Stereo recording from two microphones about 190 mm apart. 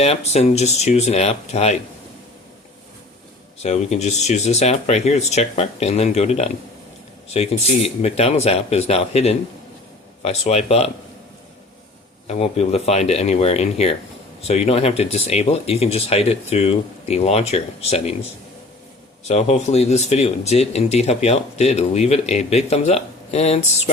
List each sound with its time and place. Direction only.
0.0 s speech: 35° left (ahead or behind)
3.6 s speech: 35° left (ahead or behind)
12.3 s speech: 35° left (ahead or behind)
19.3 s speech: 35° left (ahead or behind)